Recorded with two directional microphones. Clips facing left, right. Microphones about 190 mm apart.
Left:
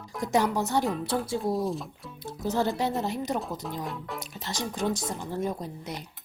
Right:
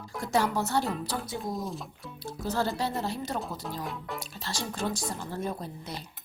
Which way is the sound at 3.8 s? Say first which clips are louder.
Left 1 dB; centre (ahead or behind).